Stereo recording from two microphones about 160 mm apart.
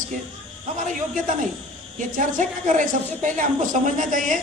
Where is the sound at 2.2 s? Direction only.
55° right (ahead or behind).